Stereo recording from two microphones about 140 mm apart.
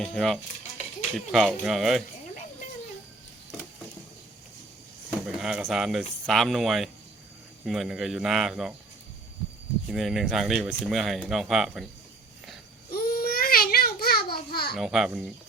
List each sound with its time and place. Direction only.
0.0 s speech: 5° left (ahead or behind)
5.2 s speech: 5° right (ahead or behind)
9.9 s speech: centre (ahead or behind)
12.9 s babbling: 90° left
14.8 s speech: 5° right (ahead or behind)